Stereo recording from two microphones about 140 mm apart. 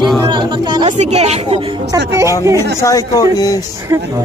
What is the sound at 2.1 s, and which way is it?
Speech, 20° right (ahead or behind).